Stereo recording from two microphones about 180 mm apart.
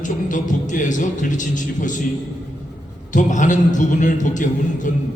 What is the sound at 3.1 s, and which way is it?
A man's voice, 45° left (ahead or behind).